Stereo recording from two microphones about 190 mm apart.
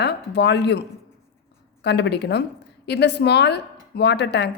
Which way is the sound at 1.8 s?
65° left (ahead or behind).